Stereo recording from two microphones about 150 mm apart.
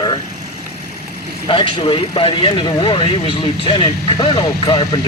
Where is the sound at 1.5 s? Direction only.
35° left (ahead or behind).